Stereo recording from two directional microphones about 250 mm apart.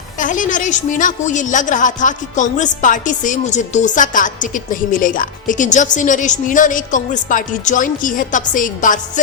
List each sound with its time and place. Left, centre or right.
0.2 s a woman's voice: left